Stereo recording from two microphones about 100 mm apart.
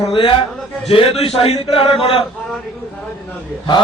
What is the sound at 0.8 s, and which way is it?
A man's voice, 80° left.